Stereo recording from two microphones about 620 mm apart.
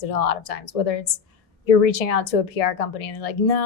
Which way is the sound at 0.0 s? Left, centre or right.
Left.